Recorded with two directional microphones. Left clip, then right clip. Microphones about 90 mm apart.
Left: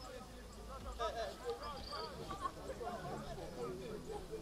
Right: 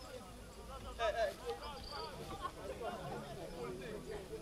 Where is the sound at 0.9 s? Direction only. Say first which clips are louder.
Right 5 dB; 25° right (ahead or behind).